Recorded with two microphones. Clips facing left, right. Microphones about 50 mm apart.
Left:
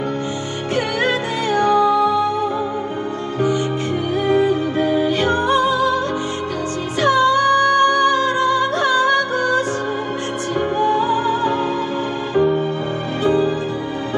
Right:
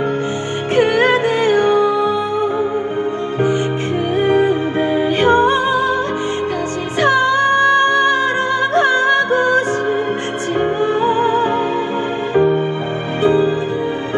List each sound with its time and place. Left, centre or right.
0.7 s music: right
4.2 s music: right
7.0 s music: right
10.6 s music: right